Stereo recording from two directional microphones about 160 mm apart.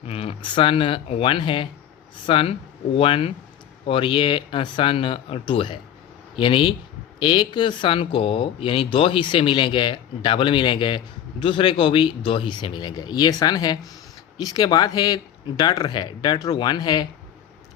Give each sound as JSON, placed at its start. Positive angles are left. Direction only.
{"t": 0.1, "sound": "speech", "side_deg": 35}